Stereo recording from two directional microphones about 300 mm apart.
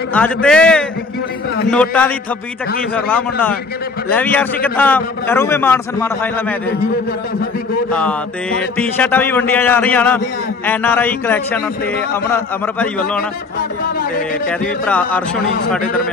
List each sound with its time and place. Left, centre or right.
0.1 s a man's voice: centre
4.7 s mantra: centre
7.9 s mantra: centre
12.1 s a man's voice: centre
14.9 s a man's voice: centre
15.8 s speech: left